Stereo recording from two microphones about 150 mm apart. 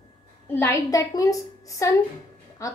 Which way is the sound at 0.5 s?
15° left (ahead or behind).